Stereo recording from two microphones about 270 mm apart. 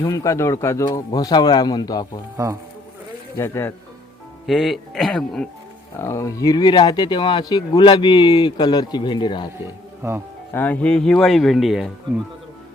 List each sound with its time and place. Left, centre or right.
0.0 s speech: centre
3.3 s speech: centre
10.0 s speech: centre
10.5 s speech: centre